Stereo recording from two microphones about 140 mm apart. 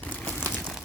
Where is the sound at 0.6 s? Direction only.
Centre (ahead or behind).